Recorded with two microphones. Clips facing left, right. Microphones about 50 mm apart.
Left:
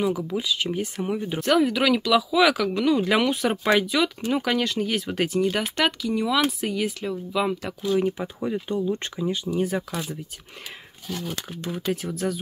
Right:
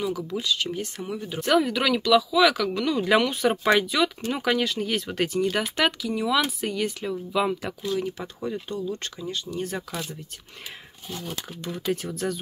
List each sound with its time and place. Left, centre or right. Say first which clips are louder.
0.0 s speech: left 3 dB; centre
1.4 s speech: left 1 dB; centre
8.0 s speech: left 5 dB; centre
11.4 s speech: right 1 dB; centre